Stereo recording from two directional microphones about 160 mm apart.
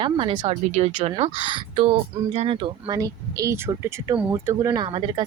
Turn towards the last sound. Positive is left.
turn(degrees=-30)  # may be behind; listen again after turning